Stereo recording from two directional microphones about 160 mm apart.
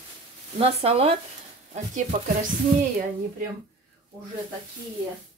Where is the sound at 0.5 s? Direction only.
40° right (ahead or behind).